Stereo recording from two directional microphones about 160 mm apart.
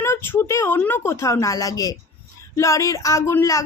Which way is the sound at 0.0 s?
15° left (ahead or behind).